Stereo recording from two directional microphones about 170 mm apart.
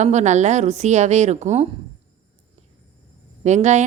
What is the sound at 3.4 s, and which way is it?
Speech, 40° right (ahead or behind).